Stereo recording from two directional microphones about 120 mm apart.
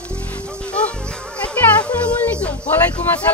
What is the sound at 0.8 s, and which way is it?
Music, 10° left (ahead or behind).